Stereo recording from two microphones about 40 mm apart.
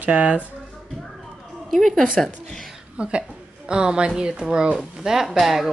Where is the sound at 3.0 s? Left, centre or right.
Right.